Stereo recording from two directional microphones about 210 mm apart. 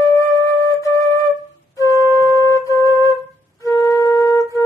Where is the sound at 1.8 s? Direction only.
15° right (ahead or behind).